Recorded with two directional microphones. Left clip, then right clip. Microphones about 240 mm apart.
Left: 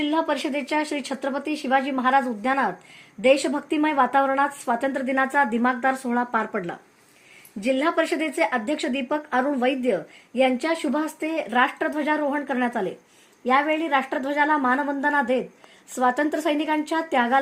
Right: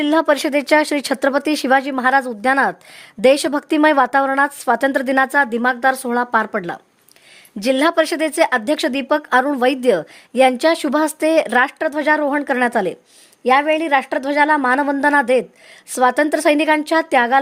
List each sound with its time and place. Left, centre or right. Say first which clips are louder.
0.0 s a woman's voice: right 8 dB; right